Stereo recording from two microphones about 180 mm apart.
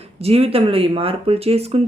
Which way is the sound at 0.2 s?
35° right (ahead or behind).